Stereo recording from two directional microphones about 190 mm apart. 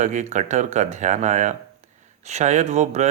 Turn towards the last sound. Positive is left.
turn(degrees=-40)  # may be behind; listen again after turning